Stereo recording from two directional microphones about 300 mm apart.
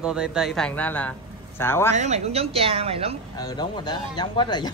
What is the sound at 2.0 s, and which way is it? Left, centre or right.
A woman's voice, right.